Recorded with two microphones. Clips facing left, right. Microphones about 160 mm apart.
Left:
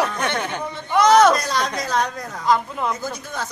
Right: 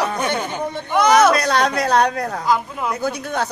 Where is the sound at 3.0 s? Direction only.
65° right (ahead or behind).